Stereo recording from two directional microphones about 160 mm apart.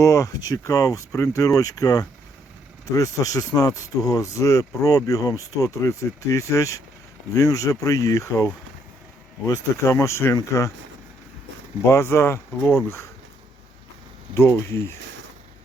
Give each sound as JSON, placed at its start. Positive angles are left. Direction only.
{"t": 0.0, "sound": "speech", "side_deg": 20}
{"t": 9.5, "sound": "speech", "side_deg": 20}
{"t": 11.9, "sound": "speech", "side_deg": 15}
{"t": 14.3, "sound": "speech", "side_deg": 15}